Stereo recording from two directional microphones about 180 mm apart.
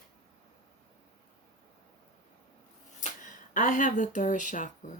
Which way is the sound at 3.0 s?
45° left (ahead or behind).